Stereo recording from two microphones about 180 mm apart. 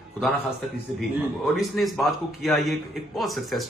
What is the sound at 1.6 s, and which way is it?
Speech, centre (ahead or behind).